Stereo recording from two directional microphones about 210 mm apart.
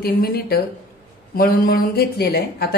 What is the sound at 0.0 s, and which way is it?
A woman's voice, 45° left (ahead or behind).